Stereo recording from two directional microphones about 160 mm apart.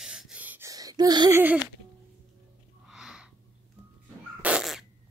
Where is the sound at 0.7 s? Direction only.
20° right (ahead or behind).